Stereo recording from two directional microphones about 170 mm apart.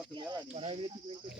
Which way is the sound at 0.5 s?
35° right (ahead or behind).